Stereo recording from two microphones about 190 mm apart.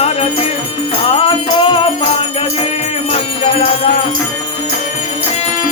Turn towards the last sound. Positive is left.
turn(degrees=30)  # may be behind; listen again after turning